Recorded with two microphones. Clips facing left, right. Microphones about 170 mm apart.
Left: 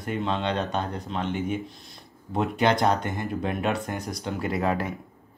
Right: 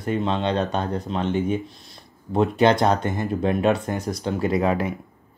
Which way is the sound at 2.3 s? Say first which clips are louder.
Right 5 dB; 25° right (ahead or behind).